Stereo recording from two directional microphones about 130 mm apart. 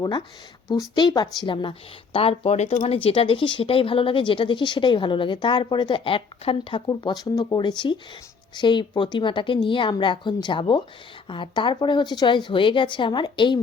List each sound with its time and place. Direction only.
0.0 s speech: 35° left (ahead or behind)
6.8 s speech: 30° left (ahead or behind)